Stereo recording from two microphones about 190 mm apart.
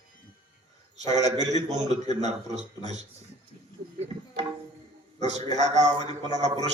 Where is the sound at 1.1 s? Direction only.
35° right (ahead or behind).